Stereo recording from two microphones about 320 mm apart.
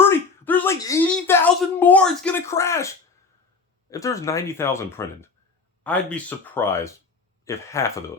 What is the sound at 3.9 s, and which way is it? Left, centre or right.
Speech, centre.